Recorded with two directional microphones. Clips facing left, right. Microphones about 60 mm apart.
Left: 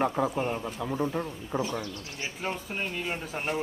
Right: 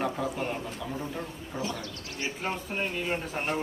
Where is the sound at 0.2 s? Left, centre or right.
Left.